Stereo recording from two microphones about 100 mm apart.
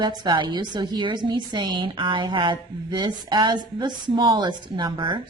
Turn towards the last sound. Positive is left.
turn(degrees=-50)  # may be behind; listen again after turning